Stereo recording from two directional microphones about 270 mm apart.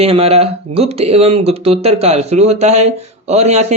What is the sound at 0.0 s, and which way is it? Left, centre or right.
Speech, right.